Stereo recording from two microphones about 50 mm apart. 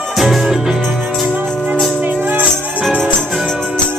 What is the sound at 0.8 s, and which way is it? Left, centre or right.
Music, right.